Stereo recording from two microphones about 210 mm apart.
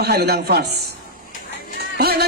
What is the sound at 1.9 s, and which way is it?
Speech, 50° right (ahead or behind).